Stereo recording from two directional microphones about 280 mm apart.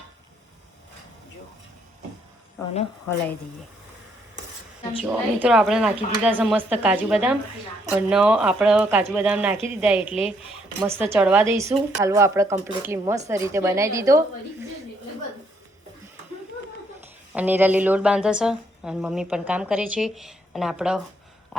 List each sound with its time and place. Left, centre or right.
4.9 s speech: centre
17.3 s speech: centre
21.5 s a sound: centre